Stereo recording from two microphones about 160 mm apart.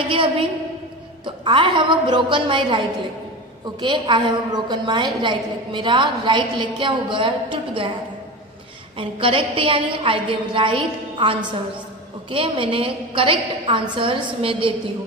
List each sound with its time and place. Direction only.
1.2 s a woman's voice: 30° right (ahead or behind)
3.8 s a woman's voice: 30° right (ahead or behind)
8.9 s a woman's voice: 35° right (ahead or behind)